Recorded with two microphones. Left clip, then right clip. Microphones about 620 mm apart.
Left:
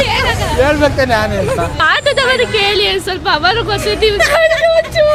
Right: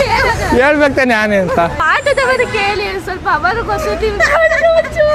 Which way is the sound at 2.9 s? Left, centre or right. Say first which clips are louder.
Left 1 dB; left.